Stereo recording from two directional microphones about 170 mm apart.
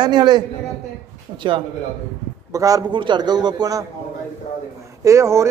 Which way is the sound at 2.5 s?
20° right (ahead or behind).